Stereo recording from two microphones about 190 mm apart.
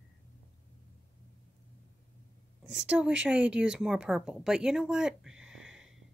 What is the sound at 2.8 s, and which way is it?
Speech, 5° right (ahead or behind).